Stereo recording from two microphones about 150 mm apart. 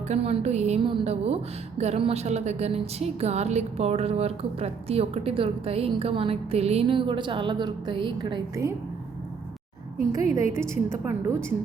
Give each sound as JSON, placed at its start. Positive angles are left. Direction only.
{"t": 0.1, "sound": "a woman's voice", "side_deg": -45}
{"t": 8.6, "sound": "a woman's voice", "side_deg": -20}
{"t": 10.1, "sound": "a woman's voice", "side_deg": -20}